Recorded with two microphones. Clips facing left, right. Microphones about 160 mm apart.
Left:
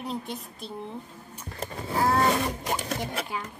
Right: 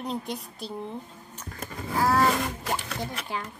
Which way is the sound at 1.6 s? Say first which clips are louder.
Even; 30° left (ahead or behind).